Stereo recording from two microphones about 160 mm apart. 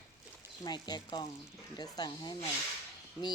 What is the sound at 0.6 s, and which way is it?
Speech, 25° left (ahead or behind).